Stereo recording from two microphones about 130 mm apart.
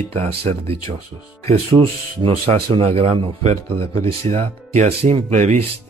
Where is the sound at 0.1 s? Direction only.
55° right (ahead or behind).